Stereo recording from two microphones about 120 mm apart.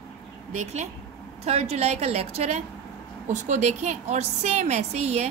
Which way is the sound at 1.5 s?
60° right (ahead or behind).